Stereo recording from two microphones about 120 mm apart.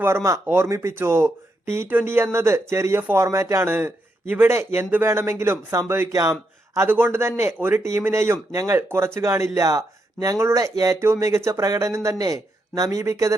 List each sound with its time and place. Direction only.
0.0 s speech: 25° right (ahead or behind)